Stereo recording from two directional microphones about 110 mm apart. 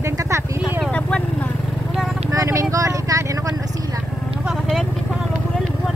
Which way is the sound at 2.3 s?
30° right (ahead or behind).